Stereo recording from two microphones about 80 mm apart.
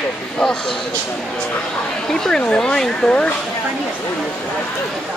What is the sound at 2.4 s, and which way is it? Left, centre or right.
Speech, centre.